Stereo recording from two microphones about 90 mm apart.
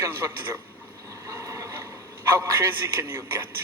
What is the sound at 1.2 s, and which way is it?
Vehicle, 40° right (ahead or behind).